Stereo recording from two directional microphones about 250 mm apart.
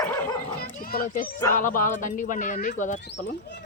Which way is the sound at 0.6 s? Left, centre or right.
Left.